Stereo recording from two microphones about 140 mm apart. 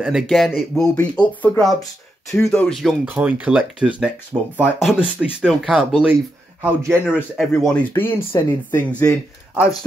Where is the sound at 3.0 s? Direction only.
10° right (ahead or behind).